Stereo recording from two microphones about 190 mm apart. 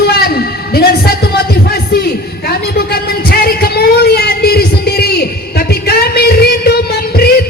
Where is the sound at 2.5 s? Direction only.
55° left (ahead or behind).